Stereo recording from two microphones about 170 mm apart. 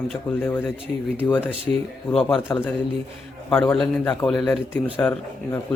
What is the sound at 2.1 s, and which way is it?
Speech, centre (ahead or behind).